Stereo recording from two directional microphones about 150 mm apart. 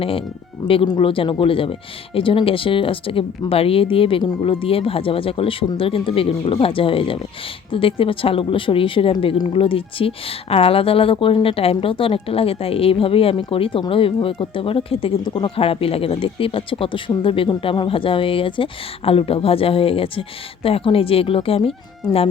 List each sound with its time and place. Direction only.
0.0 s speech: 40° left (ahead or behind)